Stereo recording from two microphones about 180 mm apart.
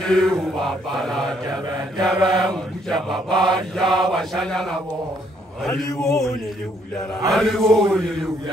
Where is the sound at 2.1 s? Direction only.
25° right (ahead or behind).